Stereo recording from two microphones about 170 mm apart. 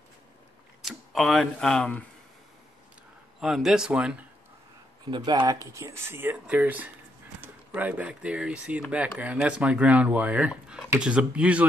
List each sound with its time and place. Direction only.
0.8 s speech: centre (ahead or behind)
3.3 s speech: 5° right (ahead or behind)
5.1 s speech: 25° right (ahead or behind); by 11.6 s 5° right (ahead or behind)